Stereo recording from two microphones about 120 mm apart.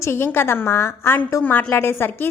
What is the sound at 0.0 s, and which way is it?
A woman's voice, 20° left (ahead or behind).